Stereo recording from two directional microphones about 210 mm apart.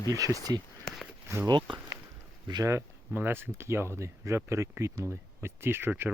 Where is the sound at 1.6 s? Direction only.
25° right (ahead or behind).